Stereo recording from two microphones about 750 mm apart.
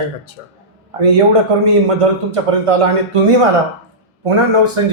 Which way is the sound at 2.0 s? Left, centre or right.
Right.